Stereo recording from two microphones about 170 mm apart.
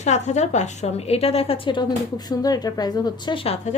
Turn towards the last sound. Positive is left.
turn(degrees=35)  # may be behind; listen again after turning